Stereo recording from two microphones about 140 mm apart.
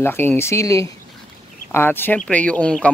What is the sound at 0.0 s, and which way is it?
A man's voice, 15° left (ahead or behind).